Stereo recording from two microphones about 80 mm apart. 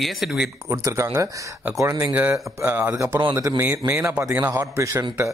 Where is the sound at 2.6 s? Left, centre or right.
Right.